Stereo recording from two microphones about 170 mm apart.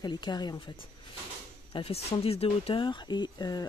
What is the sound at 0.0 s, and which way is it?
Speech, 25° left (ahead or behind).